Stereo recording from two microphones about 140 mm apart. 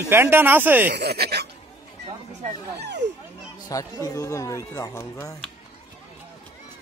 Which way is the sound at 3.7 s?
25° left (ahead or behind).